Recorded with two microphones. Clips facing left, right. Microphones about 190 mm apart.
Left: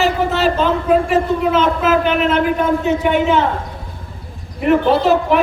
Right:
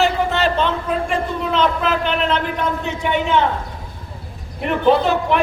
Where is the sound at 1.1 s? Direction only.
5° left (ahead or behind).